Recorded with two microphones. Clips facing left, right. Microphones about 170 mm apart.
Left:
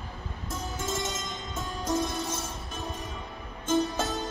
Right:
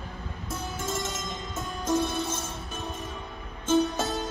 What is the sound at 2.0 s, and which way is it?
Music, 15° left (ahead or behind).